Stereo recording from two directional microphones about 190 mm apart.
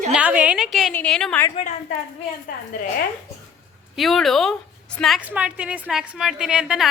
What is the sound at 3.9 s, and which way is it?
A woman's voice, centre (ahead or behind).